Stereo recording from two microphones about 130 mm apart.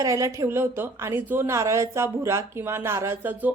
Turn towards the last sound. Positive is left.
turn(degrees=-15)  # may be behind; listen again after turning